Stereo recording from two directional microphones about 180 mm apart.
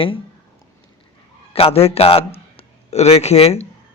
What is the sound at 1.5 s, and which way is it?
A man's voice, 35° left (ahead or behind).